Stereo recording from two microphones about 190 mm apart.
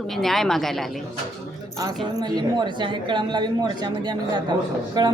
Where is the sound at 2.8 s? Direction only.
25° right (ahead or behind).